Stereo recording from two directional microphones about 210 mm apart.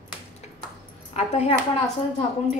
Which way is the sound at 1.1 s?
30° left (ahead or behind).